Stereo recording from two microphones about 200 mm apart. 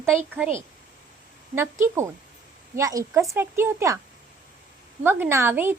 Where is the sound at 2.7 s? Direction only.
15° right (ahead or behind).